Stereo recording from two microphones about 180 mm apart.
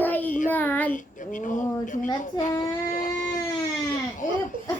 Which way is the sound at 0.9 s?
45° left (ahead or behind).